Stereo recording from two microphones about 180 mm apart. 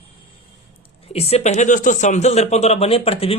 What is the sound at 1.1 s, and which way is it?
Speech, 35° left (ahead or behind).